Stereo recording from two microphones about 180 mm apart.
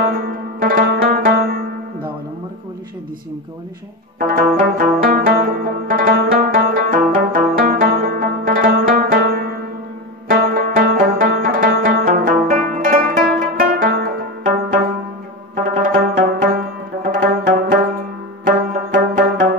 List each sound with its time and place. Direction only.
0.0 s music: 55° right (ahead or behind)
4.2 s zither: 50° right (ahead or behind)
10.2 s music: 55° right (ahead or behind)
15.5 s music: 45° right (ahead or behind)